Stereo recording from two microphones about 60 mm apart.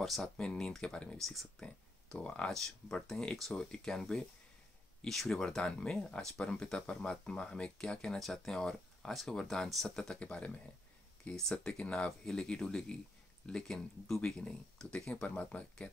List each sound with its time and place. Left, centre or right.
0.0 s speech: centre
0.4 s speech: centre
1.2 s speech: centre
2.1 s speech: centre